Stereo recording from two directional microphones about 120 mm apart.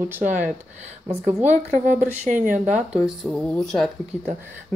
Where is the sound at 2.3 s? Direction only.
85° right.